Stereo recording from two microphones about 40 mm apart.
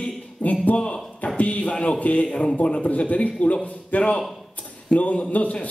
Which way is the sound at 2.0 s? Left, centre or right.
Left.